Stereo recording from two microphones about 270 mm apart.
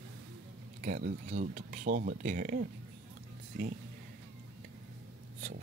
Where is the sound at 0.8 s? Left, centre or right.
Right.